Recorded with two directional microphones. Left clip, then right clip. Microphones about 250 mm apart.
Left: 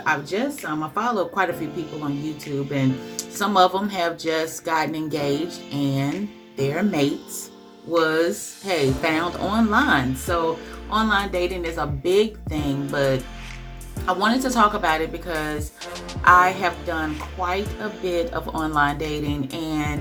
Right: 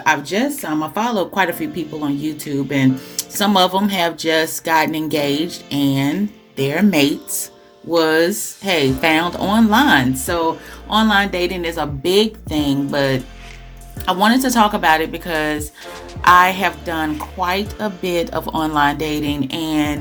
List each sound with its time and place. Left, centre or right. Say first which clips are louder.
0.0 s speech: right 6 dB; right
2.7 s speech: right 8 dB; right